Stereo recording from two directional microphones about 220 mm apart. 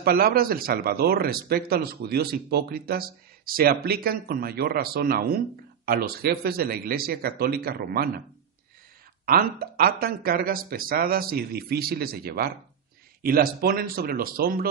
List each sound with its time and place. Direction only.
0.0 s speech: 45° right (ahead or behind)
9.2 s speech: 40° right (ahead or behind)